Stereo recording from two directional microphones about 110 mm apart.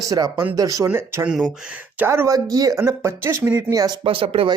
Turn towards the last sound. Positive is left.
turn(degrees=-55)  # may be behind; listen again after turning